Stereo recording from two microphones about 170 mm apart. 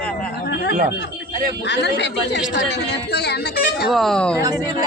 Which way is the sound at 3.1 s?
75° left (ahead or behind).